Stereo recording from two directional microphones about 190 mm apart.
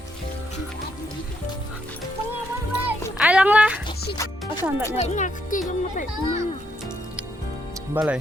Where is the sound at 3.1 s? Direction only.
5° right (ahead or behind).